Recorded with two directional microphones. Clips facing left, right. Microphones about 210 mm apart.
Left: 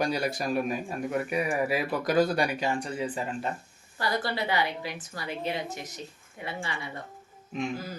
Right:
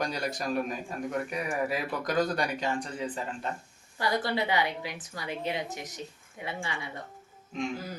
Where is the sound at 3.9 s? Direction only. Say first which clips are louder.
Right 1 dB; 20° right (ahead or behind).